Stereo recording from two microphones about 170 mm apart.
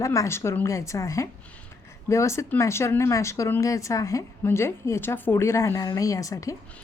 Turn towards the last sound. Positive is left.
turn(degrees=20)  # may be behind; listen again after turning